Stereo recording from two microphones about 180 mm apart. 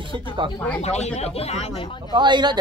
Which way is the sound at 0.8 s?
35° left (ahead or behind).